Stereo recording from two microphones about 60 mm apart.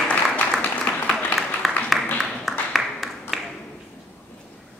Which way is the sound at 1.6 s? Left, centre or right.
Centre.